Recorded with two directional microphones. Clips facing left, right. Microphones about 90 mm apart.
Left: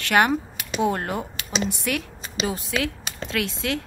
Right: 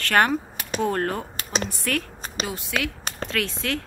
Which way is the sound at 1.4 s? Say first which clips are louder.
Left 1 dB; 45° right (ahead or behind).